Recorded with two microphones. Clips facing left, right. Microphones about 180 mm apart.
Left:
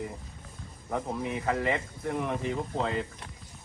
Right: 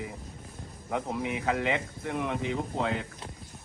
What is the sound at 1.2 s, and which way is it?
Speech, 90° right.